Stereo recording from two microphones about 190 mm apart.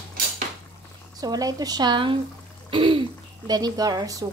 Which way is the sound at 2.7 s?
25° right (ahead or behind).